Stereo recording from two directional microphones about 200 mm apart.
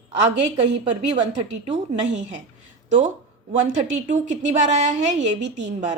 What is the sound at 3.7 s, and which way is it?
A woman's voice, 35° right (ahead or behind).